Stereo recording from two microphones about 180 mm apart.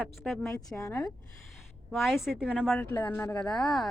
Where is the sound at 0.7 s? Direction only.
15° left (ahead or behind).